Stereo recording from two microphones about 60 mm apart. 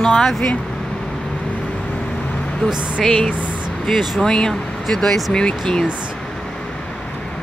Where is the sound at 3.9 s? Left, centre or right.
Centre.